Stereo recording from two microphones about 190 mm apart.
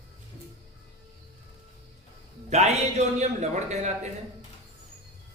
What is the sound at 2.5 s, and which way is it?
Speech, 35° right (ahead or behind).